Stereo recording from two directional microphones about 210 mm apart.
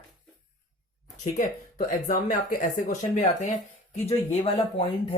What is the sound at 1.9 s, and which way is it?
Speech, 40° left (ahead or behind).